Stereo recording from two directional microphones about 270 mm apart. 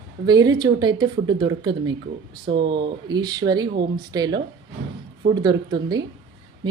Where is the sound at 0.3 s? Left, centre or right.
Centre.